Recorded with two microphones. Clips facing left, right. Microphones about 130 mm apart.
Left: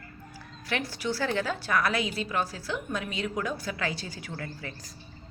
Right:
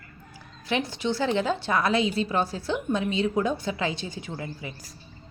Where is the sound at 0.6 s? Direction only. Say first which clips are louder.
Right 4 dB; 20° right (ahead or behind).